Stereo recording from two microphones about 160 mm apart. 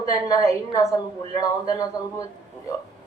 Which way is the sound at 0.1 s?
20° left (ahead or behind).